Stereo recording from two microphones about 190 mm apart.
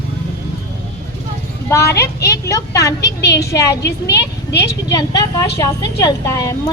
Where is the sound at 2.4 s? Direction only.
15° left (ahead or behind).